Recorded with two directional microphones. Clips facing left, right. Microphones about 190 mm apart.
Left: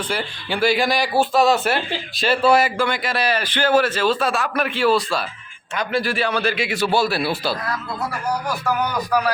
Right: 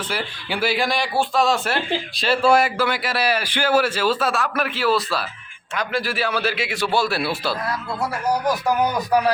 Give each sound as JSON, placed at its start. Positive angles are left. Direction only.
{"t": 0.1, "sound": "speech", "side_deg": -5}
{"t": 8.6, "sound": "speech", "side_deg": -25}